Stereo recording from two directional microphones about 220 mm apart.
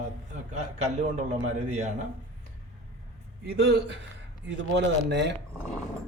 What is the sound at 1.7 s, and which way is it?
Speech, 30° right (ahead or behind).